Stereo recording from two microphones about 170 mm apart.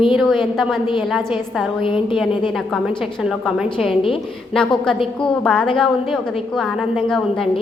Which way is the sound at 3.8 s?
30° left (ahead or behind).